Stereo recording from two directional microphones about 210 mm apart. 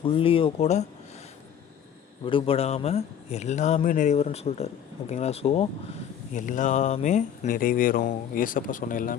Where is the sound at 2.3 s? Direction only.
25° left (ahead or behind).